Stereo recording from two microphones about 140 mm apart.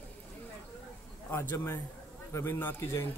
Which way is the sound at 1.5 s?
15° left (ahead or behind).